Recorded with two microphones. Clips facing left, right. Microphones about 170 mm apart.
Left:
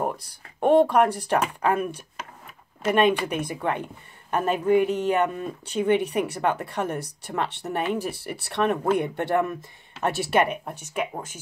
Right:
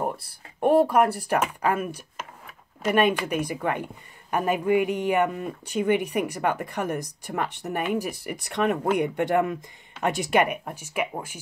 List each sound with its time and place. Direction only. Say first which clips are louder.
0.6 s speech: left 1 dB; 10° right (ahead or behind)